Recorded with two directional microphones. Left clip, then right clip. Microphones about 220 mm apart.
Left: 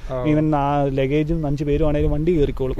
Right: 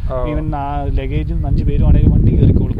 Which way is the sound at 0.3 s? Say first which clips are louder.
Left 3 dB; 50° left (ahead or behind).